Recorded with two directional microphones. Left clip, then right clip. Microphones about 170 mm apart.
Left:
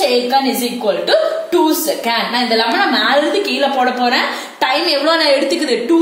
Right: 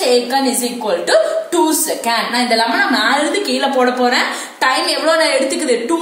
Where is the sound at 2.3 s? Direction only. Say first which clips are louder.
Even; 50° left (ahead or behind).